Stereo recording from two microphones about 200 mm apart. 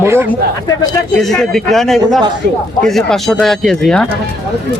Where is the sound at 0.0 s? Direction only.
15° right (ahead or behind).